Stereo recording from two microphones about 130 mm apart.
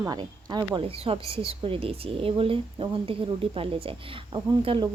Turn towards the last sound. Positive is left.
turn(degrees=-40)  # may be behind; listen again after turning